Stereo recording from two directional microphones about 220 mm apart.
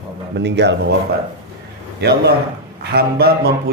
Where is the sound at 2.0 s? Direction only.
50° right (ahead or behind).